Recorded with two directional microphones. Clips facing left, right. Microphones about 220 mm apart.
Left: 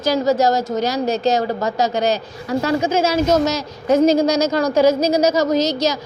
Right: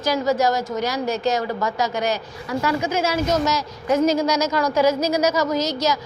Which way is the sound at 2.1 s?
25° left (ahead or behind).